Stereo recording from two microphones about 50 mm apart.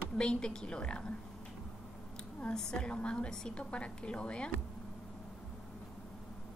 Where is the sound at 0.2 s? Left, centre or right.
Centre.